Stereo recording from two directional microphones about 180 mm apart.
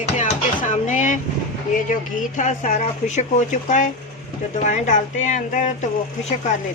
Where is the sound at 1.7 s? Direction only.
45° left (ahead or behind).